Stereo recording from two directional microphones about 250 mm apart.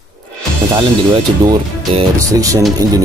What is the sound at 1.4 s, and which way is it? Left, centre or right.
Speech, centre.